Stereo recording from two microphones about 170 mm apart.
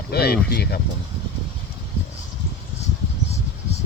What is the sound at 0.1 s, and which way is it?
Speech, 70° left (ahead or behind).